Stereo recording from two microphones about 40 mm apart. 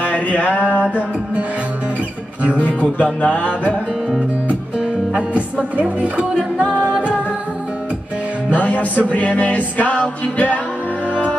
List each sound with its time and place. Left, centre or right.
0.0 s music: left
2.6 s music: left
5.3 s music: right
8.5 s music: left